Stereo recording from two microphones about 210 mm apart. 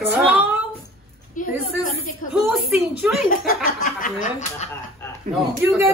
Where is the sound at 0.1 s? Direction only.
5° right (ahead or behind).